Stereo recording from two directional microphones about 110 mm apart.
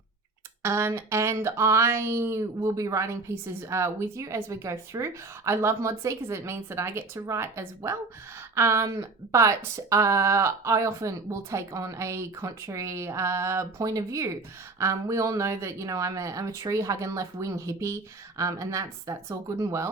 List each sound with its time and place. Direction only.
0.6 s speech: 25° right (ahead or behind)